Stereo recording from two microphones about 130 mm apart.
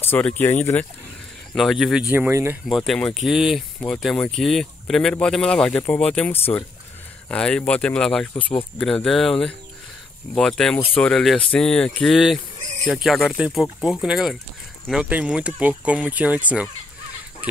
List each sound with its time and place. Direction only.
0.1 s speech: 10° left (ahead or behind)
1.5 s speech: centre (ahead or behind)
2.0 s speech: 15° right (ahead or behind)
2.7 s speech: 5° left (ahead or behind)
7.2 s speech: 5° left (ahead or behind); by 16.7 s 10° right (ahead or behind)